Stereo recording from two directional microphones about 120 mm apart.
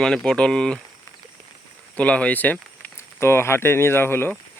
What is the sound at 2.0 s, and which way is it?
Speech, 10° left (ahead or behind).